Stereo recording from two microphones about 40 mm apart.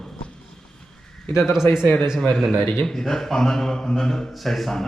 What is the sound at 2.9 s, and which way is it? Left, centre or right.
A man's voice, centre.